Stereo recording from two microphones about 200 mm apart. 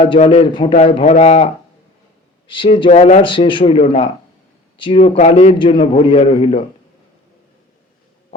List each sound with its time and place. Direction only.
0.0 s a man's voice: 25° left (ahead or behind)
2.5 s a man's voice: 25° left (ahead or behind)
3.2 s a man's voice: 25° left (ahead or behind)